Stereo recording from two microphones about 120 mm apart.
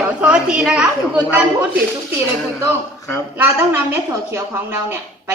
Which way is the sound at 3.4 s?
20° right (ahead or behind).